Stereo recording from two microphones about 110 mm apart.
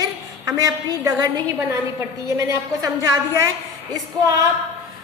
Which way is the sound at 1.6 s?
25° right (ahead or behind).